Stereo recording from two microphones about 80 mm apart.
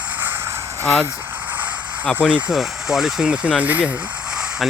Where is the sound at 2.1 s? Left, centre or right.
Centre.